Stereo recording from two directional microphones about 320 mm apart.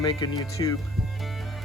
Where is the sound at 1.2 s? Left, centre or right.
Centre.